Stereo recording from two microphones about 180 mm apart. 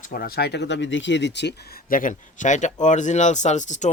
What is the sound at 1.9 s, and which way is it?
Speech, 50° left (ahead or behind).